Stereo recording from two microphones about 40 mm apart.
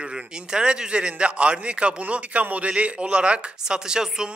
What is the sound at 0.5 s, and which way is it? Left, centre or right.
A man's voice, right.